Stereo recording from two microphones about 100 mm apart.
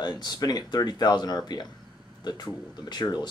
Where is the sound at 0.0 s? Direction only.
45° left (ahead or behind).